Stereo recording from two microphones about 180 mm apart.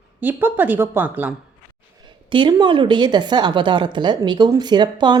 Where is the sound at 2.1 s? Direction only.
25° right (ahead or behind).